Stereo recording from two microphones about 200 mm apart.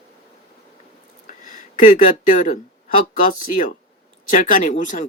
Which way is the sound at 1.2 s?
40° left (ahead or behind).